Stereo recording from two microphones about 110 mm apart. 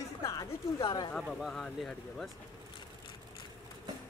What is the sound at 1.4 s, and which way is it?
Speech, centre (ahead or behind).